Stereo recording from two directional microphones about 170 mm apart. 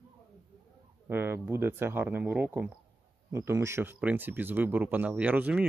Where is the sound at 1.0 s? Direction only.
15° right (ahead or behind).